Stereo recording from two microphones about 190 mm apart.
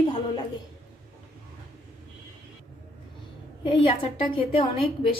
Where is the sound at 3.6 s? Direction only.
25° left (ahead or behind).